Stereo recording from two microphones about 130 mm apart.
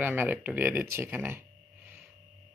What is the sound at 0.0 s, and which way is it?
Speech, 15° right (ahead or behind).